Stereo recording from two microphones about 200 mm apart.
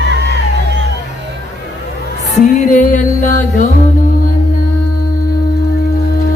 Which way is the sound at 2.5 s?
40° left (ahead or behind).